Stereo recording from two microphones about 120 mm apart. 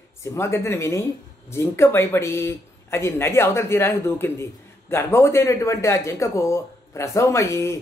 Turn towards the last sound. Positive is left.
turn(degrees=25)  # may be behind; listen again after turning